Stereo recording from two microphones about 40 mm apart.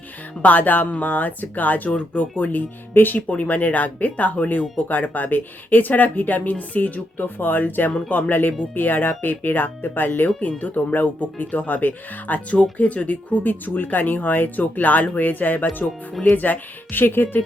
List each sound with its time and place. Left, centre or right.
0.4 s speech: left
3.2 s speech: left
12.7 s speech: left
13.4 s speech: left